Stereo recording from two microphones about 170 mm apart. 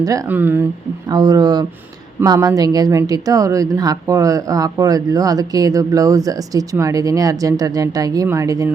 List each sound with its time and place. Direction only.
0.0 s speech: 15° right (ahead or behind)
1.1 s speech: 25° right (ahead or behind)